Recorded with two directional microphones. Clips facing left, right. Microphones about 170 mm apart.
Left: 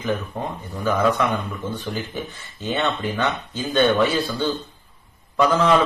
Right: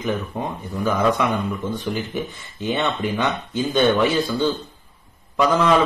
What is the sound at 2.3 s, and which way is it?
Speech, 15° right (ahead or behind).